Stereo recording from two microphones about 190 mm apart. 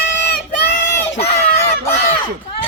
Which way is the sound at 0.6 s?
65° left (ahead or behind).